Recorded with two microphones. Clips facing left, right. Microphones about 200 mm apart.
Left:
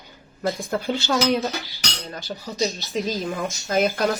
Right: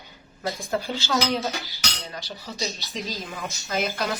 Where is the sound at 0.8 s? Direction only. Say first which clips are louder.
Left 6 dB; 60° left (ahead or behind).